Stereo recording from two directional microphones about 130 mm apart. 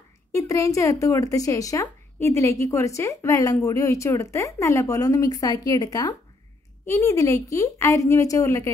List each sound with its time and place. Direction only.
0.3 s speech: 25° left (ahead or behind)